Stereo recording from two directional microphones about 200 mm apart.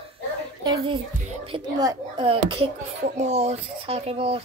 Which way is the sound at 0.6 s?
25° right (ahead or behind).